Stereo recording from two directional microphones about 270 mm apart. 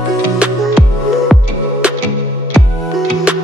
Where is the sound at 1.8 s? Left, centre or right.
Centre.